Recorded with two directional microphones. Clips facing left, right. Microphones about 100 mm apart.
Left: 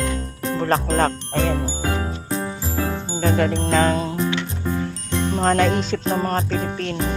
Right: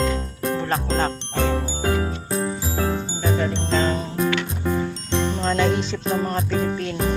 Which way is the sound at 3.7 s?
65° left (ahead or behind).